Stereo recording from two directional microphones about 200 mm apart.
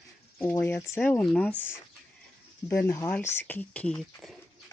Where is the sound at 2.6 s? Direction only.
10° left (ahead or behind).